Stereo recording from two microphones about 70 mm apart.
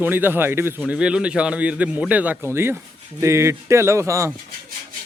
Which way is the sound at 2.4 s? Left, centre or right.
Right.